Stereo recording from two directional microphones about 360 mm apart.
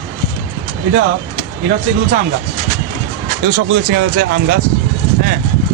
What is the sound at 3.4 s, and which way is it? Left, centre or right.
Speech, right.